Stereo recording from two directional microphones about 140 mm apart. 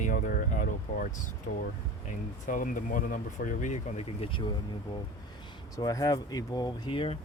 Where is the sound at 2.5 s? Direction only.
70° left (ahead or behind); by 4.5 s 35° left (ahead or behind).